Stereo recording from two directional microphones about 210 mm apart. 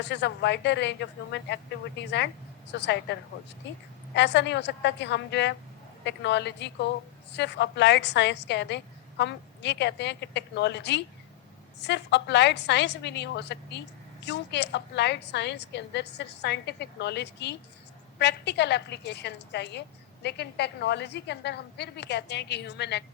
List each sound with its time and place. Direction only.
0.0 s a woman's voice: 55° left (ahead or behind)